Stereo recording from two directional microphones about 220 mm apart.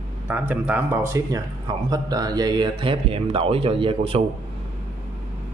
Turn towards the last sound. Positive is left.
turn(degrees=-25)  # may be behind; listen again after turning